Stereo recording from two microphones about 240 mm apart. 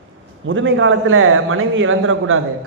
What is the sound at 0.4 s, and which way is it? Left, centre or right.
A man's voice, right.